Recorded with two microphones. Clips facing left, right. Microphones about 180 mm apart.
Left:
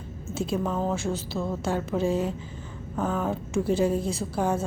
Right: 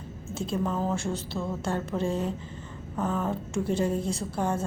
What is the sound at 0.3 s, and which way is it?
A woman's voice, 5° left (ahead or behind).